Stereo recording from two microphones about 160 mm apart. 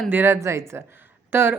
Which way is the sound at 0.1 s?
15° right (ahead or behind).